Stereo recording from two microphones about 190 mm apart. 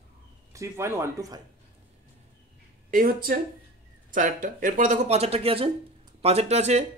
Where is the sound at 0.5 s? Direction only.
15° right (ahead or behind).